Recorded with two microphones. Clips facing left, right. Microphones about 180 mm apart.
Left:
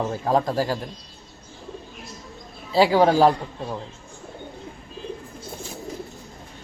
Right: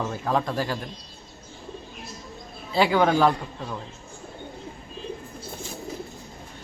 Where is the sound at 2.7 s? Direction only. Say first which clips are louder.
Left 3 dB; 35° left (ahead or behind).